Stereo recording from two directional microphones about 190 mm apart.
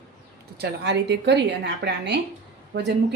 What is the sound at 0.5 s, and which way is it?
A woman's voice, 60° right (ahead or behind).